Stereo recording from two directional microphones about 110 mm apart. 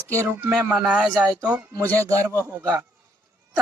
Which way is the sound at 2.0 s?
25° right (ahead or behind).